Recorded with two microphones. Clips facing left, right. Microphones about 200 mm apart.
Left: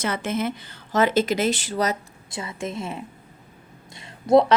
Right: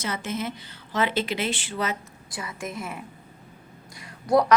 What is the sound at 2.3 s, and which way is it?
Speech, 25° left (ahead or behind).